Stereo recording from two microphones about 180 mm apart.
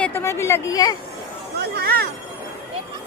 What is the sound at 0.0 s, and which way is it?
Speech, 15° left (ahead or behind).